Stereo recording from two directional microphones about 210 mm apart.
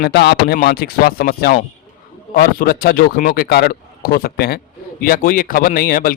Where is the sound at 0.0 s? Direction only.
55° left (ahead or behind).